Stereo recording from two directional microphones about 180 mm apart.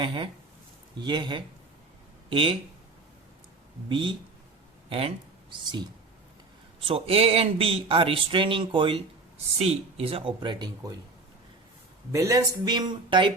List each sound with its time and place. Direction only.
0.0 s speech: 25° right (ahead or behind)
3.8 s speech: 30° right (ahead or behind)
6.8 s speech: 30° right (ahead or behind)
12.1 s speech: 20° right (ahead or behind)